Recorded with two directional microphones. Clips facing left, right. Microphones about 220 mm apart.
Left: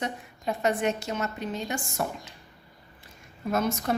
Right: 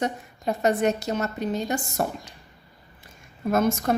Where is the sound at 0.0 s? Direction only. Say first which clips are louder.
Right 5 dB; 40° right (ahead or behind).